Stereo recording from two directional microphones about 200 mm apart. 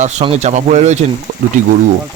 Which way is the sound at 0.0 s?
35° right (ahead or behind).